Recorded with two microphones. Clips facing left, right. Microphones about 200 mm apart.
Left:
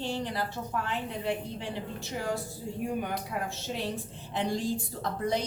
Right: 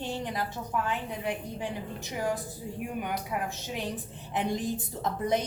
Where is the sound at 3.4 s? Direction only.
15° right (ahead or behind).